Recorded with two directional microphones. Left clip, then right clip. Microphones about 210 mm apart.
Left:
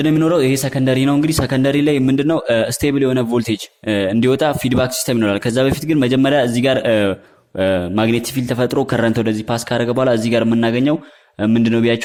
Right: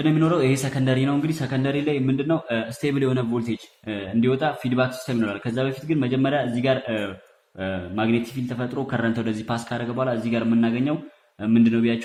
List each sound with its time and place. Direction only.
0.0 s speech: 45° left (ahead or behind)
2.9 s speech: 30° left (ahead or behind); by 11.9 s 50° left (ahead or behind)